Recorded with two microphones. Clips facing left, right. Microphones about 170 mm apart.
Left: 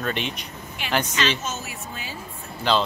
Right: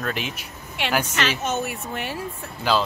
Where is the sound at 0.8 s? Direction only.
80° right.